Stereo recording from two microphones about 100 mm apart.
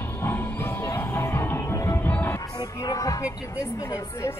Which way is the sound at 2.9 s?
35° left (ahead or behind).